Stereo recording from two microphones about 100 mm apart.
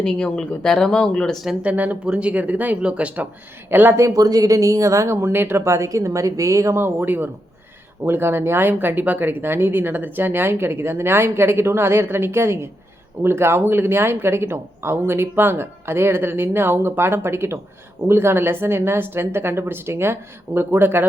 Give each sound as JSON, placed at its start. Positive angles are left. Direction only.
{"t": 0.0, "sound": "speech", "side_deg": 5}
{"t": 1.5, "sound": "speech", "side_deg": -15}
{"t": 5.1, "sound": "speech", "side_deg": -20}